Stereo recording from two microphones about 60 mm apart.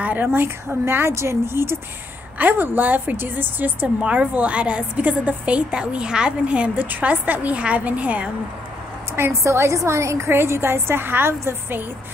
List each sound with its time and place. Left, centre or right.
0.0 s a woman's voice: right
2.3 s a woman's voice: right
9.1 s a woman's voice: right